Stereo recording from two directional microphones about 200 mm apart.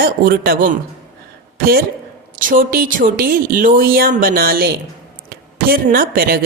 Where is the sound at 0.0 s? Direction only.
45° right (ahead or behind).